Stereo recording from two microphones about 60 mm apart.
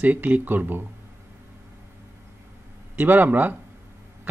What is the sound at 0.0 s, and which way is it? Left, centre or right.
Speech, right.